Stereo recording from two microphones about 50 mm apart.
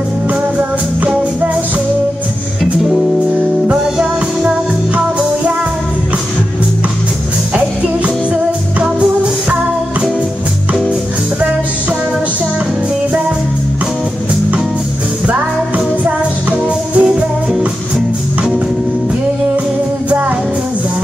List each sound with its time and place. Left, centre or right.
2.6 s music: centre
7.5 s music: right
16.0 s music: right